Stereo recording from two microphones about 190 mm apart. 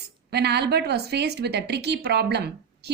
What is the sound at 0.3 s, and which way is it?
A woman's voice, 60° right (ahead or behind).